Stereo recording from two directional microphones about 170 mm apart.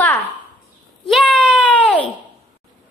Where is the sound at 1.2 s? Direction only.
5° left (ahead or behind).